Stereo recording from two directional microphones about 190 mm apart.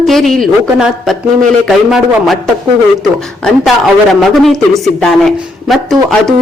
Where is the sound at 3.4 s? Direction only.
Centre (ahead or behind).